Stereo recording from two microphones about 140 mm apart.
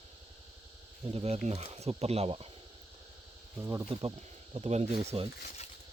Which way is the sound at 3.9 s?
40° right (ahead or behind).